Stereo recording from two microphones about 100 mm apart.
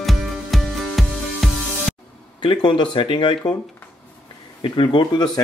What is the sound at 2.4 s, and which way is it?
Speech, 50° left (ahead or behind).